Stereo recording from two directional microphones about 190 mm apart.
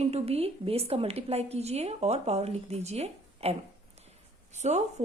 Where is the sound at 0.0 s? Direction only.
35° right (ahead or behind).